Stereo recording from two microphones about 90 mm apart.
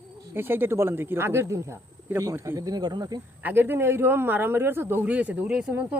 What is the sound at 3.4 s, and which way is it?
Speech, 20° right (ahead or behind).